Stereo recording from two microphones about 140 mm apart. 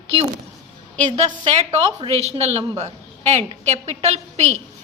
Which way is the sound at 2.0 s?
45° right (ahead or behind).